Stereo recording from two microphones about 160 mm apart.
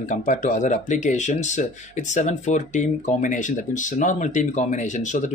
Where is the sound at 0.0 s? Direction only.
50° left (ahead or behind).